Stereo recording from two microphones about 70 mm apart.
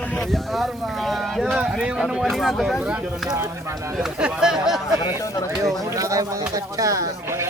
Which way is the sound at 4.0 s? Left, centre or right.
Centre.